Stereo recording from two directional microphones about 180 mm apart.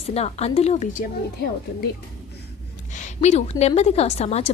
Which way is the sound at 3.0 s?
40° left (ahead or behind).